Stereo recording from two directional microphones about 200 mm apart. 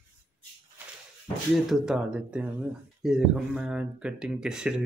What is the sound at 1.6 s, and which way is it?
Speech, 5° right (ahead or behind).